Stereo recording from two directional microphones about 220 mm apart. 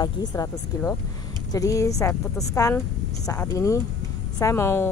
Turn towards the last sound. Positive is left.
turn(degrees=10)  # may be behind; listen again after turning